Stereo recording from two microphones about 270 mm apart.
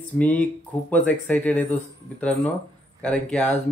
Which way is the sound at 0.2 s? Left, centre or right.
Centre.